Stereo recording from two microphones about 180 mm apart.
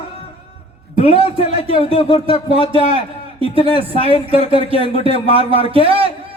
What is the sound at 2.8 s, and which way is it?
A man's voice, 30° right (ahead or behind).